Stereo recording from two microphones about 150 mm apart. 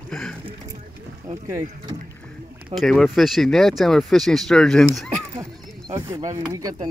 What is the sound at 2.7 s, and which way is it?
Speech, 5° left (ahead or behind).